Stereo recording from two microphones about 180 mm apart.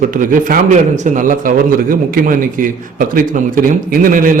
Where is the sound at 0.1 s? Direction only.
50° right (ahead or behind).